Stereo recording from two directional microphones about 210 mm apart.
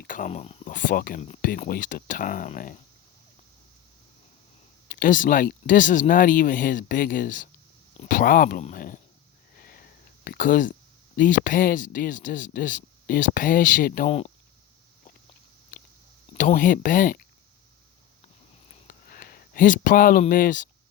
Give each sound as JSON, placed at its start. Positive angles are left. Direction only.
{"t": 0.0, "sound": "a sound", "side_deg": 40}
{"t": 0.7, "sound": "speech", "side_deg": 40}
{"t": 4.9, "sound": "speech", "side_deg": 40}
{"t": 9.6, "sound": "sniff", "side_deg": 45}
{"t": 10.2, "sound": "speech", "side_deg": 40}
{"t": 15.7, "sound": "chewing", "side_deg": 40}
{"t": 16.3, "sound": "speech", "side_deg": 35}
{"t": 18.9, "sound": "a sound", "side_deg": 45}